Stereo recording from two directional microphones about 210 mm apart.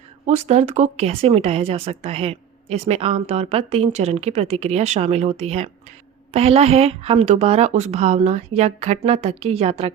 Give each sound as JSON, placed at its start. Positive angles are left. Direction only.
{"t": 0.3, "sound": "speech", "side_deg": -30}